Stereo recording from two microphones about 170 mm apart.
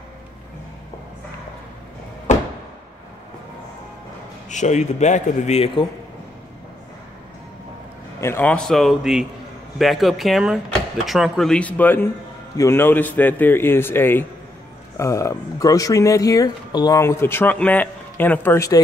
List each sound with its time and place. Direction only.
2.3 s a sound: 45° left (ahead or behind)
4.5 s a man's voice: 45° left (ahead or behind)
8.2 s a man's voice: 15° left (ahead or behind)